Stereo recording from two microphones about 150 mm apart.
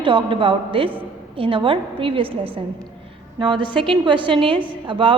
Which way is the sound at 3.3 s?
35° right (ahead or behind).